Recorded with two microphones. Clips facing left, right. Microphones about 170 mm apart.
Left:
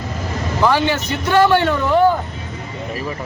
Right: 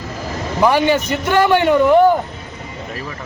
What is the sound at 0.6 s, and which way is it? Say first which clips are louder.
A man's voice: right 3 dB; 15° right (ahead or behind).